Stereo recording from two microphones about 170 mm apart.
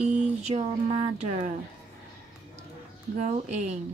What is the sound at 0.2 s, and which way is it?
A woman's voice, 40° right (ahead or behind).